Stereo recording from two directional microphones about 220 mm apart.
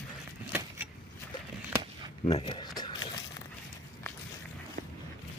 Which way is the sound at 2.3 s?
20° left (ahead or behind).